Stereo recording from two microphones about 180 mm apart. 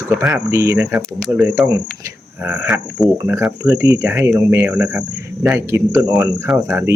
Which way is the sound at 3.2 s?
15° right (ahead or behind).